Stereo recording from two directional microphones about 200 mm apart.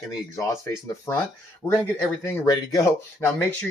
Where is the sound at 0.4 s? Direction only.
15° left (ahead or behind).